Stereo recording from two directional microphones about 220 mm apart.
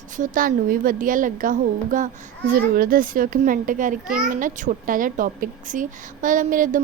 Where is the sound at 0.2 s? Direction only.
40° right (ahead or behind).